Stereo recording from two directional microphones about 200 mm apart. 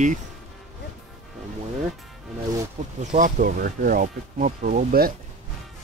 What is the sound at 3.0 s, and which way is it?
Speech, 35° right (ahead or behind).